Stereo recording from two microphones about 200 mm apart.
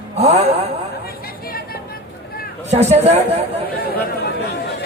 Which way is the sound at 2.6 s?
35° right (ahead or behind).